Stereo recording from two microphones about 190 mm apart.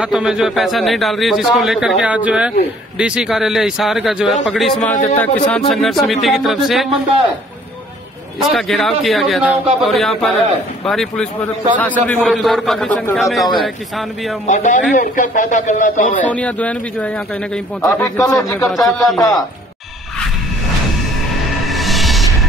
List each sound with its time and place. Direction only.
0.0 s a man's voice: 5° right (ahead or behind)
5.0 s speech: 20° left (ahead or behind)
5.7 s a man's voice: centre (ahead or behind)
8.4 s a man's voice: centre (ahead or behind)
14.4 s a man's voice: 40° left (ahead or behind)
16.3 s speech: 5° left (ahead or behind)
18.0 s speech: 20° left (ahead or behind)
18.6 s a man's voice: centre (ahead or behind)
19.1 s speech: 20° left (ahead or behind)
21.6 s music: centre (ahead or behind)